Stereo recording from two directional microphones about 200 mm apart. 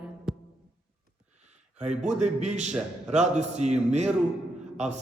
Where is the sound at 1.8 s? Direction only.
35° right (ahead or behind).